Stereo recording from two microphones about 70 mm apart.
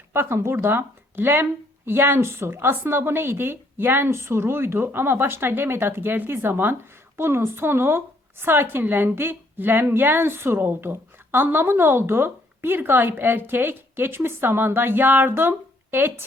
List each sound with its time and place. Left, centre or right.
0.1 s speech: right